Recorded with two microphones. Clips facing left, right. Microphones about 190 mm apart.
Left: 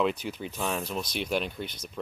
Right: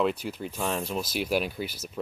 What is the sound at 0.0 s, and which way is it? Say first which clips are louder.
Speech: right 1 dB; 5° right (ahead or behind).